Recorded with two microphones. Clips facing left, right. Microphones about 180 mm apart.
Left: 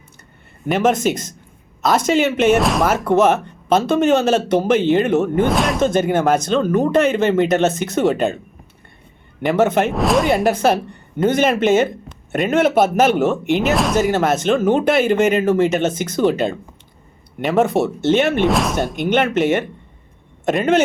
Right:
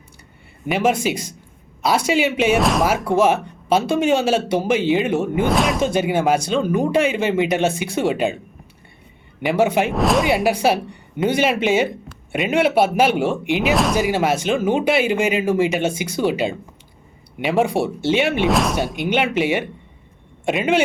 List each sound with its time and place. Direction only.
0.7 s speech: 10° right (ahead or behind)
9.6 s speech: 10° right (ahead or behind)
9.9 s speech: centre (ahead or behind)
11.4 s a man's voice: 50° left (ahead or behind)
12.3 s speech: 10° right (ahead or behind)
12.5 s a man's voice: 45° left (ahead or behind)
13.3 s speech: 10° right (ahead or behind)
18.4 s speech: centre (ahead or behind)